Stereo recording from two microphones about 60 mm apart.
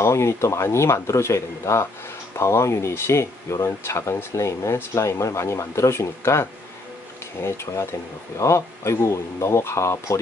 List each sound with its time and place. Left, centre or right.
0.0 s speech: left